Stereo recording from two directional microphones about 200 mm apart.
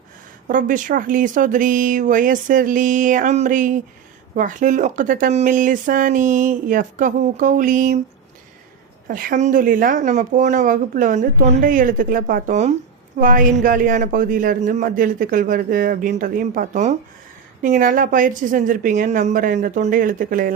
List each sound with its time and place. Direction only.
0.4 s speech: 40° right (ahead or behind)
9.0 s a man's voice: 45° right (ahead or behind)